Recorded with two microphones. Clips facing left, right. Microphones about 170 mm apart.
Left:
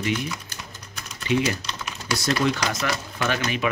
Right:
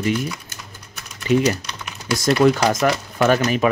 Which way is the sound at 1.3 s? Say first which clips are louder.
Right 5 dB; 45° right (ahead or behind).